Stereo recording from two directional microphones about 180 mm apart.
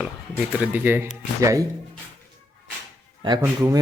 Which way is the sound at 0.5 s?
10° right (ahead or behind).